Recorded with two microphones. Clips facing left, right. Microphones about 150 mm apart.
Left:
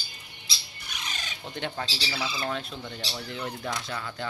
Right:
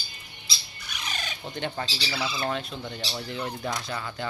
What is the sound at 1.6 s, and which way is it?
A man's voice, centre (ahead or behind).